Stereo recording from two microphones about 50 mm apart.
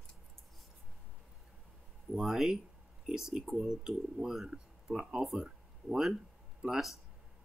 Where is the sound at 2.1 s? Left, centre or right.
Centre.